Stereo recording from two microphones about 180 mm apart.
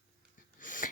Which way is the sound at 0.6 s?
45° left (ahead or behind).